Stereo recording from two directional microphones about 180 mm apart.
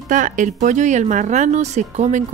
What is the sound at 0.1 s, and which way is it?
A woman's voice, 45° right (ahead or behind).